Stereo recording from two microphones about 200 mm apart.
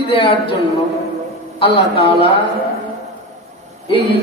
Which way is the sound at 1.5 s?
25° left (ahead or behind).